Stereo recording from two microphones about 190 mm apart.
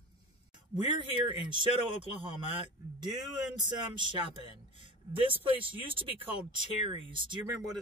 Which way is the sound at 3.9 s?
25° right (ahead or behind).